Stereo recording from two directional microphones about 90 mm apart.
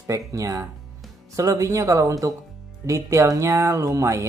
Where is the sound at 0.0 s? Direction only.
35° right (ahead or behind).